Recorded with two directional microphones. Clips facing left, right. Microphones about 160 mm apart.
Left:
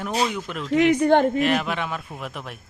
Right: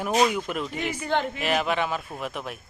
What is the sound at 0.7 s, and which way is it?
Speech, 85° left.